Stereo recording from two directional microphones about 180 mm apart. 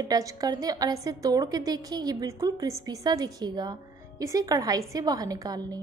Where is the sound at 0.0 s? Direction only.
20° right (ahead or behind).